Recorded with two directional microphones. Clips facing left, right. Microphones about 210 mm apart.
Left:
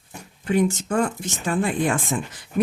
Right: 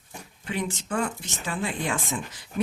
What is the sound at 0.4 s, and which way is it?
Speech, 45° left (ahead or behind).